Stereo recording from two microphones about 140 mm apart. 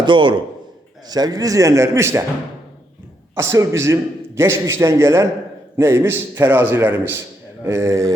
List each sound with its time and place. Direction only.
0.0 s a man's voice: 35° right (ahead or behind); by 2.2 s 20° right (ahead or behind)
3.3 s a man's voice: 20° right (ahead or behind)